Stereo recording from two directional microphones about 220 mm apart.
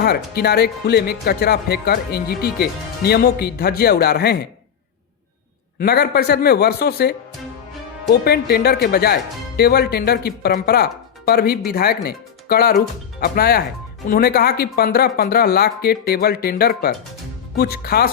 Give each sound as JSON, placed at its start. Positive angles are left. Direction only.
{"t": 0.3, "sound": "speech", "side_deg": 45}
{"t": 5.8, "sound": "speech", "side_deg": 45}
{"t": 8.2, "sound": "speech", "side_deg": 45}